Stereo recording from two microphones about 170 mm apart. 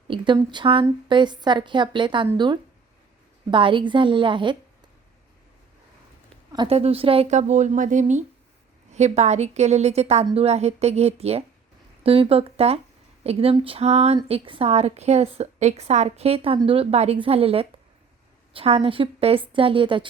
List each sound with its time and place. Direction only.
0.1 s a woman's voice: 25° right (ahead or behind)
6.7 s a woman's voice: 35° right (ahead or behind)